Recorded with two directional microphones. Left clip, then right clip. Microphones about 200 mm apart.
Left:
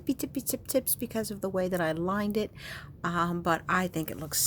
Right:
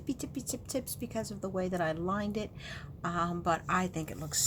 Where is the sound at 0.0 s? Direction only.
45° left (ahead or behind).